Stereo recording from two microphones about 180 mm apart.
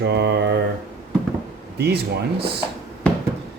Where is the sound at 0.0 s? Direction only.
70° right (ahead or behind).